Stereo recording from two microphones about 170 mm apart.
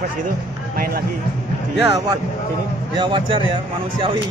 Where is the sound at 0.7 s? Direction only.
60° right (ahead or behind).